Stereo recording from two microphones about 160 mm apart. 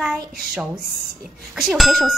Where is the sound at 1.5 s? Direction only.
5° right (ahead or behind).